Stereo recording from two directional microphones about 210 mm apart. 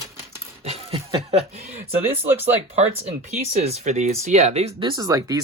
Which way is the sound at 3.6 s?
30° right (ahead or behind).